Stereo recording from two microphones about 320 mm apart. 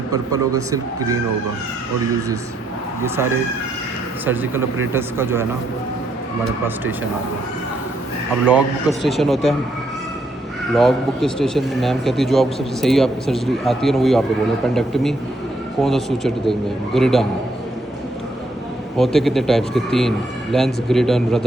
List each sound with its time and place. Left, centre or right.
0.1 s speech: centre
4.9 s speech: centre
8.4 s a man's voice: centre
10.8 s a man's voice: centre
18.9 s a man's voice: centre